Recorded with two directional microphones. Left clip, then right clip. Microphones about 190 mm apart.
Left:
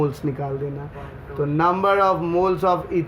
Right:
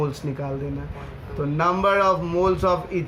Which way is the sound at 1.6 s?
45° left (ahead or behind).